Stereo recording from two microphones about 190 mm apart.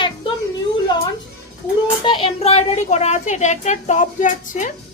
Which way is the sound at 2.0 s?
30° left (ahead or behind).